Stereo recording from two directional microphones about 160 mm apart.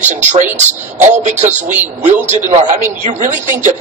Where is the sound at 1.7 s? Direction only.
10° right (ahead or behind).